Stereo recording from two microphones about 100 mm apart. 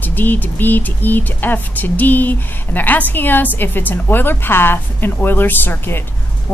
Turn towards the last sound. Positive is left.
turn(degrees=20)  # may be behind; listen again after turning